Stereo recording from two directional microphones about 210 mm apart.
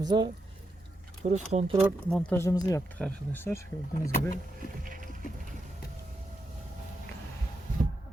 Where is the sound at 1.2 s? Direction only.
30° right (ahead or behind).